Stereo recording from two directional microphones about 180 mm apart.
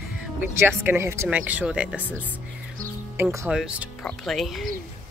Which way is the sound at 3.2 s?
15° right (ahead or behind).